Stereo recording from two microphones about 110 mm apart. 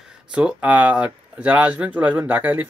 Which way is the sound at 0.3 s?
5° right (ahead or behind).